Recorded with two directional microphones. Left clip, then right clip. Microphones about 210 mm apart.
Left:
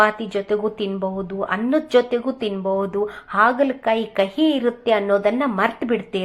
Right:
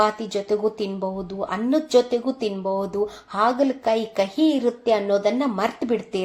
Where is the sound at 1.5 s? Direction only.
Centre (ahead or behind).